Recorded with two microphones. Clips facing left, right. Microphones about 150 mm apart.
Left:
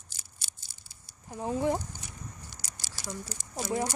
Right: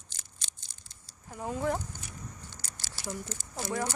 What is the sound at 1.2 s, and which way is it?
Speech, 20° left (ahead or behind).